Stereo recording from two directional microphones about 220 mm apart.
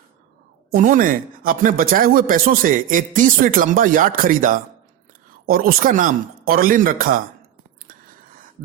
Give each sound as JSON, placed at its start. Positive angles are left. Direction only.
{"t": 0.7, "sound": "speech", "side_deg": -40}